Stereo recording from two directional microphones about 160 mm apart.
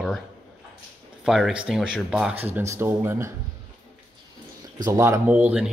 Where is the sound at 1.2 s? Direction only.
5° right (ahead or behind).